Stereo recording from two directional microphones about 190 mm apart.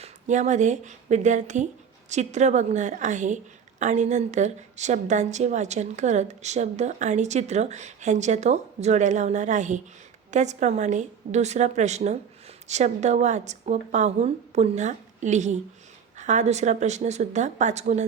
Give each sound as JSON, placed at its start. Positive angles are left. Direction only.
{"t": 0.0, "sound": "a woman's voice", "side_deg": -40}